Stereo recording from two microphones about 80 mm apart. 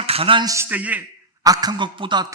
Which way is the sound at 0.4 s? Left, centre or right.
Right.